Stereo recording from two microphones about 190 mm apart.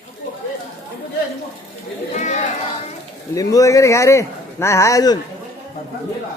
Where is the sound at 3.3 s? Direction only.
15° left (ahead or behind).